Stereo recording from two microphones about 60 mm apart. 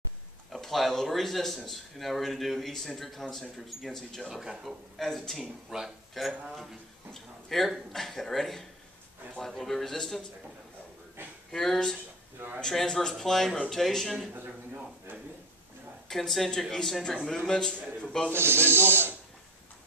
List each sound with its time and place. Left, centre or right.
0.5 s a man's voice: centre
4.3 s a man's voice: centre
5.4 s speech: centre
6.1 s a man's voice: centre
11.5 s a man's voice: centre
16.1 s a man's voice: centre
18.3 s speech: right